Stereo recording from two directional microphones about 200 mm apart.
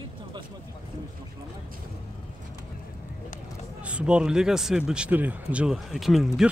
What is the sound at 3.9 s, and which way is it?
Speech, 5° right (ahead or behind).